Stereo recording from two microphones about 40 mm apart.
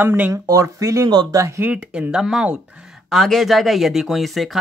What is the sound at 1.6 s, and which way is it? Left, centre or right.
Speech, right.